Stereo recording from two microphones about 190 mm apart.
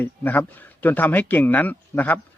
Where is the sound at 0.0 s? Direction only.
10° left (ahead or behind).